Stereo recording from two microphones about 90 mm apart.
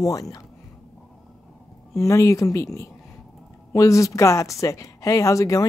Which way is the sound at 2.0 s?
35° left (ahead or behind).